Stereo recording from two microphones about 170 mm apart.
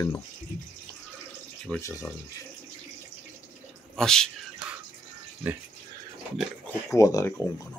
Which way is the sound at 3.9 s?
5° left (ahead or behind).